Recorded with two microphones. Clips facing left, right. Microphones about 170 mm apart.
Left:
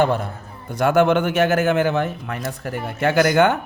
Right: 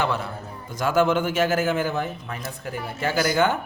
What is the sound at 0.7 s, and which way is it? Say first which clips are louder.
A man's voice: left 5 dB; 65° left (ahead or behind).